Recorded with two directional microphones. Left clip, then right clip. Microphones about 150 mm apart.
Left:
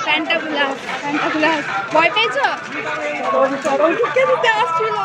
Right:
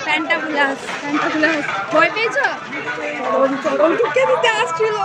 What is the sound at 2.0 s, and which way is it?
Speech, 15° right (ahead or behind).